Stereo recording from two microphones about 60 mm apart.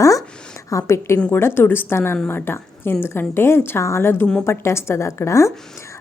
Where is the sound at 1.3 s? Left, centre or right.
Left.